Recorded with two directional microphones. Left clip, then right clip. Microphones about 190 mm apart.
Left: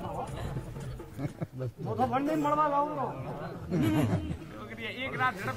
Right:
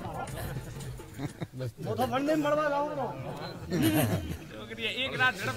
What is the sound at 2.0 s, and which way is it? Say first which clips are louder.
Speech: even; 30° right (ahead or behind).